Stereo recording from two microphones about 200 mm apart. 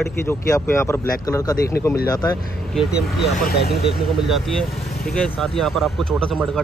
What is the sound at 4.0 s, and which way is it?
Speech, centre (ahead or behind).